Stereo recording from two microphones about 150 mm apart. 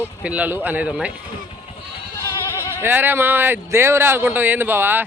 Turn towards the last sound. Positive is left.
turn(degrees=-15)  # may be behind; listen again after turning